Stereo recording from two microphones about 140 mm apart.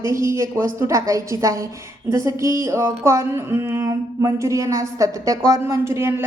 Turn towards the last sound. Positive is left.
turn(degrees=-20)  # may be behind; listen again after turning